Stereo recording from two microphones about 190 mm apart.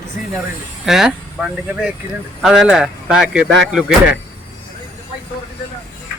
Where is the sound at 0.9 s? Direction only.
5° right (ahead or behind).